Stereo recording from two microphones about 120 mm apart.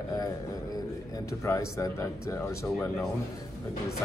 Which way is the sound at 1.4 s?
25° left (ahead or behind).